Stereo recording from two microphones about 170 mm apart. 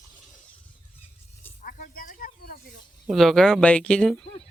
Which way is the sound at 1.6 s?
50° left (ahead or behind).